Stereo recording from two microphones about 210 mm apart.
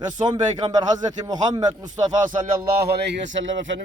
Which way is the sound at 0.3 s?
20° right (ahead or behind).